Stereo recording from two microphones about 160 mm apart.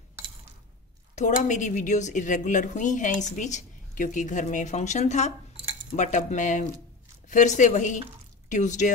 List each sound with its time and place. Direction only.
1.1 s a woman's voice: 50° left (ahead or behind)